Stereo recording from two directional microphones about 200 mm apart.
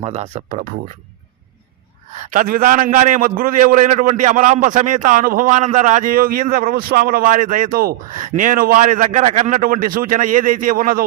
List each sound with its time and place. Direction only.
0.0 s a man's voice: 30° right (ahead or behind)
2.1 s a man's voice: 40° right (ahead or behind)